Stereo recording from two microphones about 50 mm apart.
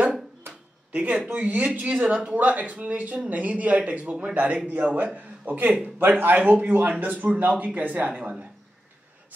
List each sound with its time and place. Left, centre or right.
0.9 s speech: right
2.3 s a man's voice: right